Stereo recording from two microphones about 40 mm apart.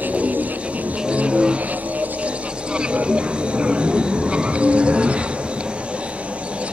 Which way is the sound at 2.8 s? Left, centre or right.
Right.